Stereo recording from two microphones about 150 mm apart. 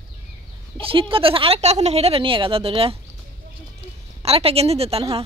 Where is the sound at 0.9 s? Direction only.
35° right (ahead or behind).